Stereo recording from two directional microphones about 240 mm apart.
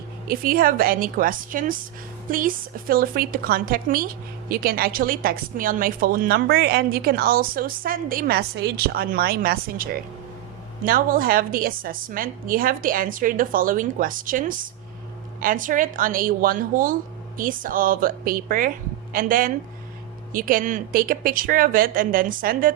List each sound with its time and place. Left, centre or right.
0.3 s a woman's voice: right